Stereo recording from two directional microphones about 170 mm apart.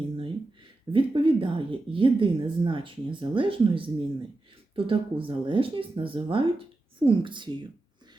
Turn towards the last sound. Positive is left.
turn(degrees=-30)  # may be behind; listen again after turning